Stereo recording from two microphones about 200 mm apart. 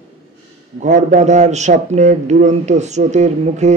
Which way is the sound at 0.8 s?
40° right (ahead or behind).